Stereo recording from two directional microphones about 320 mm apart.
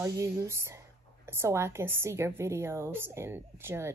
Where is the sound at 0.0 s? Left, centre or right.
Centre.